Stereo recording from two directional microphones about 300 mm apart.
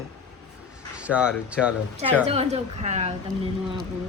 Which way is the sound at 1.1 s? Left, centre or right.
Centre.